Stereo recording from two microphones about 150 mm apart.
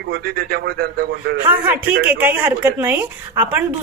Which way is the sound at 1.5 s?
10° right (ahead or behind).